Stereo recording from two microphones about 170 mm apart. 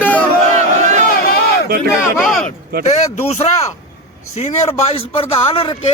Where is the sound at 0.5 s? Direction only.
45° right (ahead or behind).